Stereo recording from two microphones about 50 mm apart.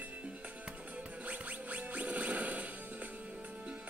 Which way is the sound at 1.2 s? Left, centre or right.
Right.